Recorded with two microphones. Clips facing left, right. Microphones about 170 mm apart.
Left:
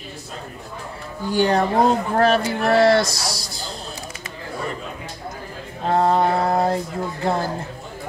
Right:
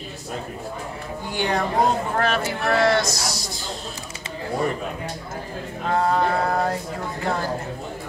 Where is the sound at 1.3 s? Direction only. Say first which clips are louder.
Left 5 dB; 35° left (ahead or behind).